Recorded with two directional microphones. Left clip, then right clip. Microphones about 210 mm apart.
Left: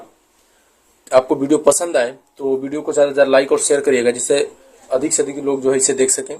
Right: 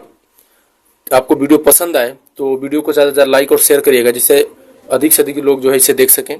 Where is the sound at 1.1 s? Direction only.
40° right (ahead or behind).